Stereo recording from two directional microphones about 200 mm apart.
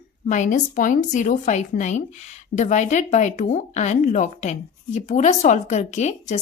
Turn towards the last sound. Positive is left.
turn(degrees=35)  # may be behind; listen again after turning